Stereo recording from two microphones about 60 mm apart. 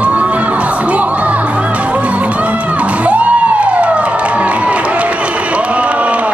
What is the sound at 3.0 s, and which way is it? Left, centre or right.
Crowd, right.